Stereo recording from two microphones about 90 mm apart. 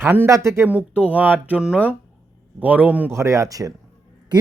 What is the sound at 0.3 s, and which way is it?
Speech, 35° right (ahead or behind).